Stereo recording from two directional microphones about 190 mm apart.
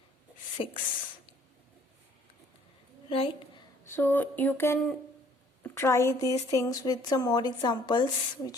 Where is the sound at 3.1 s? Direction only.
30° left (ahead or behind).